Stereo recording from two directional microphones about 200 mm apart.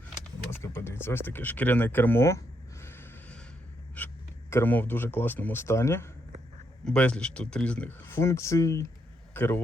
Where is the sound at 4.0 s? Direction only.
10° left (ahead or behind).